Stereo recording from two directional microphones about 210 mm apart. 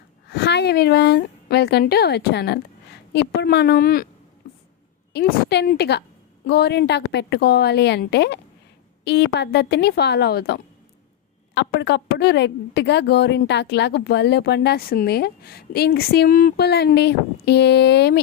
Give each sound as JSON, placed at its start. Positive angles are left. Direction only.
{"t": 0.3, "sound": "a woman's voice", "side_deg": 50}
{"t": 5.1, "sound": "a woman's voice", "side_deg": 50}